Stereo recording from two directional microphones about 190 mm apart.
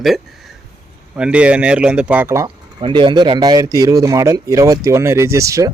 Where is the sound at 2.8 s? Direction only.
25° right (ahead or behind).